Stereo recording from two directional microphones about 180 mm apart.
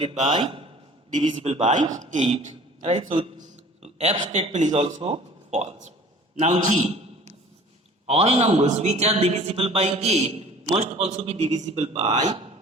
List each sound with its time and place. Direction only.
0.0 s a man's voice: 35° right (ahead or behind)
6.6 s a sound: 40° right (ahead or behind)
8.0 s a man's voice: 35° right (ahead or behind)